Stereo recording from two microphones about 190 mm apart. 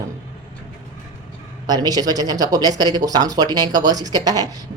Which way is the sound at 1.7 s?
20° right (ahead or behind).